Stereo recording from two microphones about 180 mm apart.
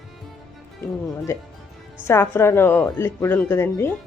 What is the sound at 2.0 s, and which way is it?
Speech, 15° left (ahead or behind).